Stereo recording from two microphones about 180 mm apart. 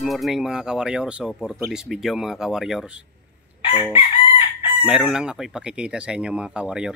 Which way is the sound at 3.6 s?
30° left (ahead or behind).